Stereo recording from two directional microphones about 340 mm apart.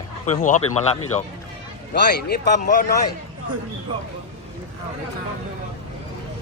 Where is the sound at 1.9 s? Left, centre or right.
Left.